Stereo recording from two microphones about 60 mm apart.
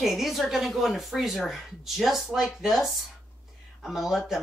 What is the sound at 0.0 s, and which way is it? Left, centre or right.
Speech, centre.